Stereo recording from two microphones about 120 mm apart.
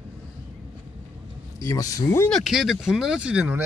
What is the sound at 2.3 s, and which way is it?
Speech, centre (ahead or behind).